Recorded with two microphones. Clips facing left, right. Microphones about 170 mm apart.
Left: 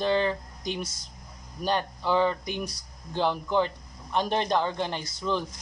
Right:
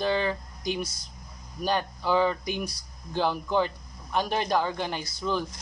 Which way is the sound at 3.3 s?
10° right (ahead or behind).